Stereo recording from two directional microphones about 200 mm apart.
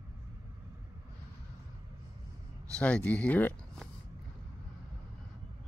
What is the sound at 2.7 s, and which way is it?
Speech, 5° left (ahead or behind).